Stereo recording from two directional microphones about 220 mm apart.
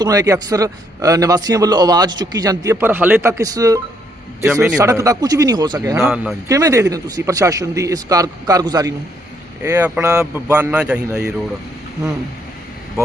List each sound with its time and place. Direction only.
0.0 s speech: 15° right (ahead or behind)
4.8 s speech: 15° right (ahead or behind)